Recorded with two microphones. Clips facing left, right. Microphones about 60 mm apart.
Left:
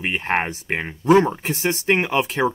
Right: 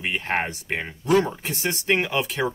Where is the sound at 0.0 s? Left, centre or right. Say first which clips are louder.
Left 3 dB; left.